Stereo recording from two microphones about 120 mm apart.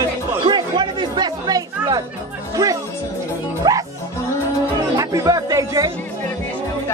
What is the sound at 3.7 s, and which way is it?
Speech, 35° right (ahead or behind).